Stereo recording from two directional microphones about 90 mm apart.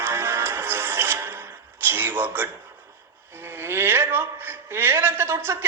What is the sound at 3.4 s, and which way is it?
A woman's voice, 25° right (ahead or behind).